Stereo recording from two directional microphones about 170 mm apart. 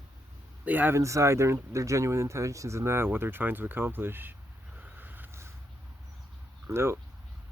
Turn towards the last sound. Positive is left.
turn(degrees=-15)  # may be behind; listen again after turning